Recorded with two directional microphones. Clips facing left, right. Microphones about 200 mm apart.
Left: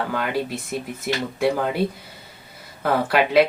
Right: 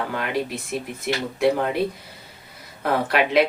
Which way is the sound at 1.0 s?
Centre (ahead or behind).